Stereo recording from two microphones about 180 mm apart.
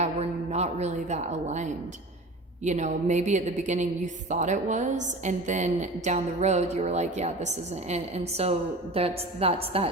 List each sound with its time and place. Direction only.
0.0 s a woman's voice: 35° right (ahead or behind)